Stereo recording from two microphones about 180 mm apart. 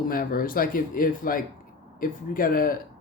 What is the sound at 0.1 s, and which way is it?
Speech, 55° left (ahead or behind).